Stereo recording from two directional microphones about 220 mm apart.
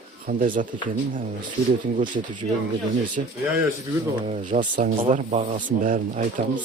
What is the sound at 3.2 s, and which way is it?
Speech, 35° right (ahead or behind).